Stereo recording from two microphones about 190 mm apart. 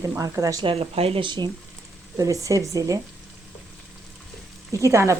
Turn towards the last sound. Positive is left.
turn(degrees=-15)  # may be behind; listen again after turning